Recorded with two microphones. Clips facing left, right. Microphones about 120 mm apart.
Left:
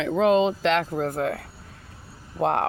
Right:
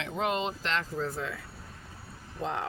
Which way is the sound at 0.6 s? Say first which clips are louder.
Left 9 dB; 80° left.